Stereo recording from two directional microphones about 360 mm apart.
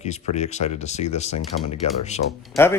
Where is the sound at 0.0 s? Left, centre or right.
Centre.